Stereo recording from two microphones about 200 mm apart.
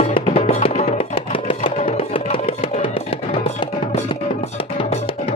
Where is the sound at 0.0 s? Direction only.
30° left (ahead or behind).